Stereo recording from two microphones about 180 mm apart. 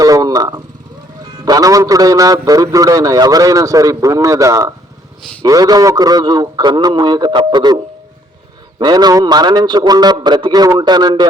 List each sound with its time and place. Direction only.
0.0 s a sound: 20° right (ahead or behind)
1.5 s a man's voice: 20° right (ahead or behind)
8.8 s a man's voice: 20° right (ahead or behind)